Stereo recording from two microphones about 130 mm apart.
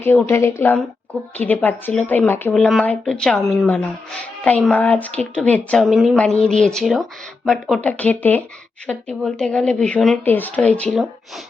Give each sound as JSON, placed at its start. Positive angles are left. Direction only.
{"t": 0.0, "sound": "speech", "side_deg": 15}
{"t": 2.5, "sound": "a woman's voice", "side_deg": 0}
{"t": 7.8, "sound": "speech", "side_deg": 10}